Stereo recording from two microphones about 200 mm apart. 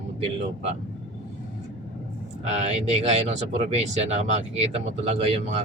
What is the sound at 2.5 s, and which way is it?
Speech, 35° right (ahead or behind).